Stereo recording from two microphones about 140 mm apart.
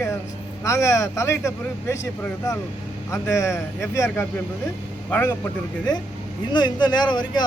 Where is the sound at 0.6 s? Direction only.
20° left (ahead or behind).